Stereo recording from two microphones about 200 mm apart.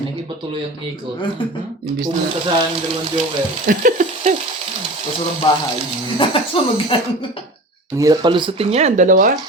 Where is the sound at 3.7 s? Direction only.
40° right (ahead or behind).